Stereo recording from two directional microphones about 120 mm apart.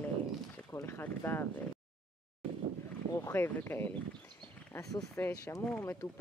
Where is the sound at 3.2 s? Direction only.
20° left (ahead or behind).